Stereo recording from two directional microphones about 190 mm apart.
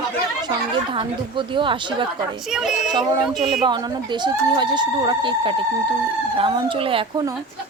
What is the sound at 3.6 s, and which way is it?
Speech, 20° right (ahead or behind).